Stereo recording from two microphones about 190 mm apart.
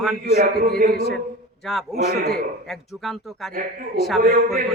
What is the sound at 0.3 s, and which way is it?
Speech, 55° right (ahead or behind).